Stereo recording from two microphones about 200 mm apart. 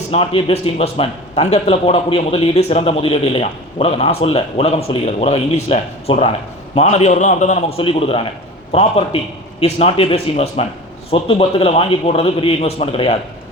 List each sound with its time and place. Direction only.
0.1 s a man's voice: 25° left (ahead or behind)